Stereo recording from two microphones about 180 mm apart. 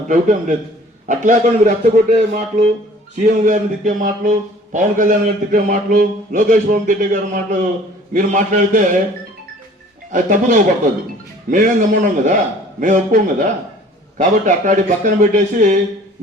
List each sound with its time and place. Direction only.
0.1 s a man's voice: 45° right (ahead or behind)
10.1 s a man's voice: 45° right (ahead or behind)